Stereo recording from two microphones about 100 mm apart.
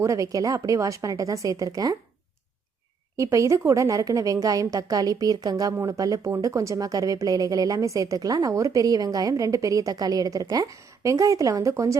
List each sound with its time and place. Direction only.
0.0 s speech: 30° right (ahead or behind)
3.2 s speech: 30° right (ahead or behind)